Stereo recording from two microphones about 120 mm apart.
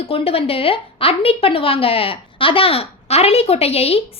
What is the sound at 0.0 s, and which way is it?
A woman's voice, 55° left (ahead or behind).